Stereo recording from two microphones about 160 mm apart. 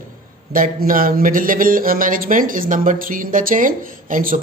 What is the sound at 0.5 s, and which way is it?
Speech, 60° right (ahead or behind).